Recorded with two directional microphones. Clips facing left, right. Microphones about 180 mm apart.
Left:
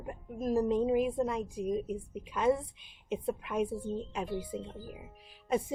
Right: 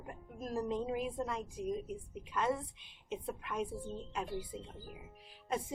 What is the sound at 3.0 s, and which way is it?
Speech, 10° left (ahead or behind).